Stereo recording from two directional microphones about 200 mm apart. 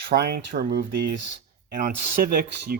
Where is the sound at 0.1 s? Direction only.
50° right (ahead or behind).